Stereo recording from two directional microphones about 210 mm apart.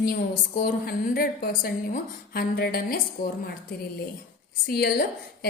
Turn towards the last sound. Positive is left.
turn(degrees=50)  # may be behind; listen again after turning